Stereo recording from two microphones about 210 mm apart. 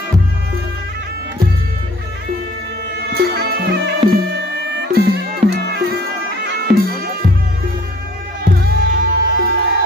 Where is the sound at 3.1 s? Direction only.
50° right (ahead or behind).